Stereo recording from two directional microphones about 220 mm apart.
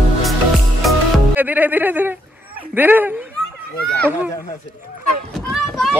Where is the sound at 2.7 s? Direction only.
10° right (ahead or behind).